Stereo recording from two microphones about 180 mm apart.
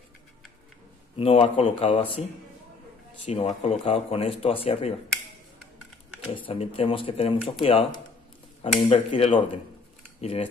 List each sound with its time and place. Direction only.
1.1 s speech: 30° left (ahead or behind)
3.3 s speech: 35° left (ahead or behind)
6.3 s speech: 30° left (ahead or behind)
8.7 s speech: 30° left (ahead or behind)